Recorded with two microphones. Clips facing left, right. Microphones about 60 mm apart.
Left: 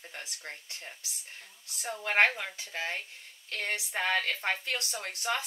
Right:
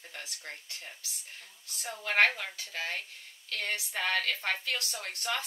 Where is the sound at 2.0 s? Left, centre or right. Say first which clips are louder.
Even; left.